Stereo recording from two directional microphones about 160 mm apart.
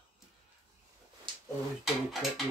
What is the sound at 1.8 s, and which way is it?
Dishes, centre (ahead or behind).